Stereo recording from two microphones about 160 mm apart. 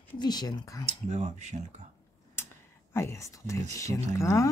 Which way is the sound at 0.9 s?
45° right (ahead or behind).